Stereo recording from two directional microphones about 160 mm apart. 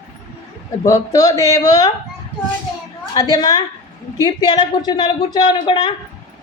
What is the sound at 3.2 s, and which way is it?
Speech, 20° left (ahead or behind).